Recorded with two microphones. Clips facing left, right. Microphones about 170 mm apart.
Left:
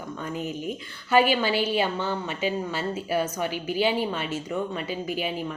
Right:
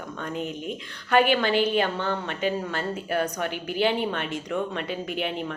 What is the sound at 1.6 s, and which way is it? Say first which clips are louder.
A woman's voice: right 1 dB; 10° left (ahead or behind).